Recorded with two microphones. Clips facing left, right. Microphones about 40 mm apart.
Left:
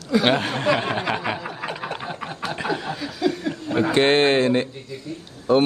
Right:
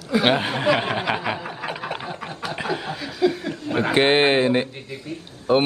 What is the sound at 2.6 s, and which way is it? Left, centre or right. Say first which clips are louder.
Chuckle: left 1 dB; centre.